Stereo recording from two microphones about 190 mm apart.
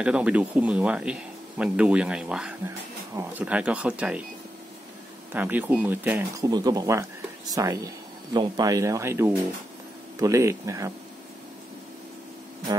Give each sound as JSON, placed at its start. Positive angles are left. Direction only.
{"t": 0.0, "sound": "speech", "side_deg": -5}
{"t": 5.3, "sound": "speech", "side_deg": -10}